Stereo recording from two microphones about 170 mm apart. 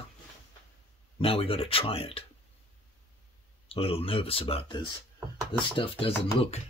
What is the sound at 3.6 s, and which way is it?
Speech, 35° left (ahead or behind).